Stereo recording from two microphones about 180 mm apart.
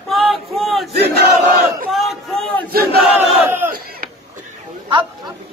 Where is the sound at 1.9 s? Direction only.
Centre (ahead or behind).